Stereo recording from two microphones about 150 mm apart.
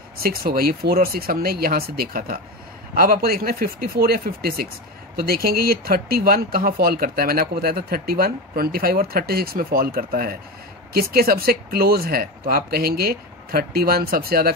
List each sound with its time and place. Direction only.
0.2 s speech: 80° right
10.9 s speech: 90° right